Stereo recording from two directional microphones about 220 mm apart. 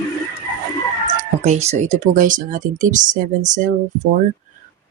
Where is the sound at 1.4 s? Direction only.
30° right (ahead or behind).